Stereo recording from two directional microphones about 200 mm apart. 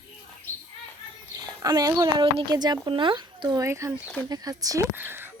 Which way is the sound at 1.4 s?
20° right (ahead or behind).